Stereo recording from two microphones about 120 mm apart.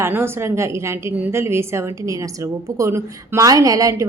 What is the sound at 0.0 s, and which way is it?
A woman's voice, 20° right (ahead or behind).